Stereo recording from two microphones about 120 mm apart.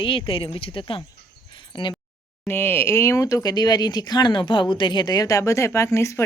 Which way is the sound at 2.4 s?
20° left (ahead or behind).